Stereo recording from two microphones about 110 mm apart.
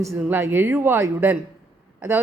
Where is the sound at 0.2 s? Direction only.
20° right (ahead or behind).